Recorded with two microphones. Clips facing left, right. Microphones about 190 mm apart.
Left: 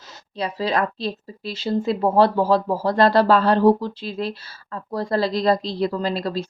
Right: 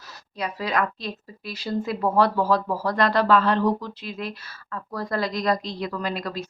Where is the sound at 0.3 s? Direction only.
30° left (ahead or behind).